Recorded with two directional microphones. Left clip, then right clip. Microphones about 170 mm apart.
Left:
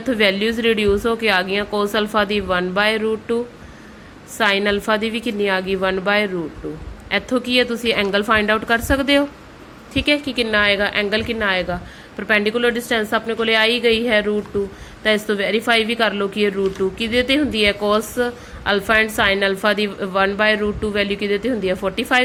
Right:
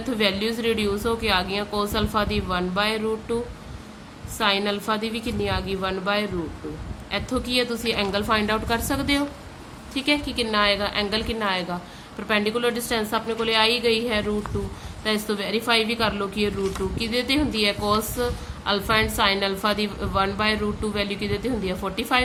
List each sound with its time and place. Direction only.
0.0 s a woman's voice: 25° left (ahead or behind)